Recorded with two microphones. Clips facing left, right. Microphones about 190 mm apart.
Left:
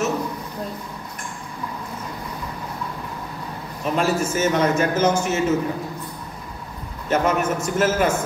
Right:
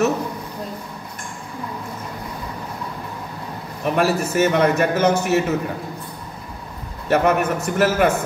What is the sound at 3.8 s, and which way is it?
A man's voice, 65° right (ahead or behind).